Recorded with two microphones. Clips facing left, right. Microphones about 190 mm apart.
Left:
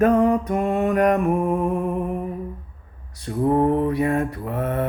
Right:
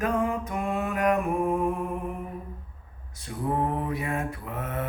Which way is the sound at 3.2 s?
55° left (ahead or behind).